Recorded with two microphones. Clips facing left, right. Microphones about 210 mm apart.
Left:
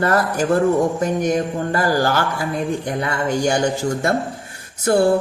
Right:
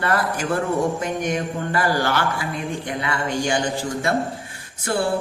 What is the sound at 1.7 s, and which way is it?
Speech, 40° left (ahead or behind).